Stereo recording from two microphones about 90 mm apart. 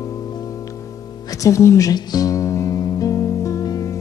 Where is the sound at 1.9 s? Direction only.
45° left (ahead or behind).